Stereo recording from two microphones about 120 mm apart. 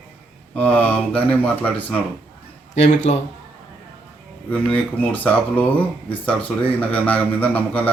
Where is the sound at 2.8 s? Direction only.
75° left (ahead or behind).